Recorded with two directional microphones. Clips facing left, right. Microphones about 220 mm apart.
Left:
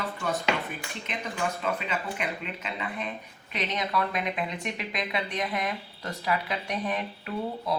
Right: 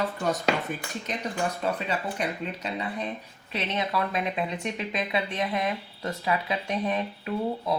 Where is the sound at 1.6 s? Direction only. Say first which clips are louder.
Right 2 dB; 35° right (ahead or behind).